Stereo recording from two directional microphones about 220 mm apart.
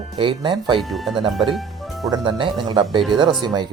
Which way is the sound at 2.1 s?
20° right (ahead or behind).